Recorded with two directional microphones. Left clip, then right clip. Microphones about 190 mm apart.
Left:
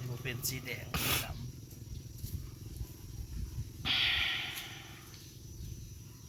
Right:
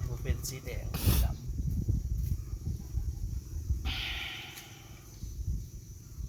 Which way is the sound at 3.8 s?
20° left (ahead or behind).